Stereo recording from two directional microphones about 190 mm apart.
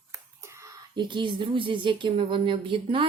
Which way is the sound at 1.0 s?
25° right (ahead or behind).